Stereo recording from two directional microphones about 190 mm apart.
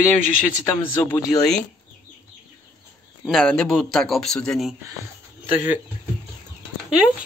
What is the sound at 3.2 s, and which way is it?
Speech, centre (ahead or behind).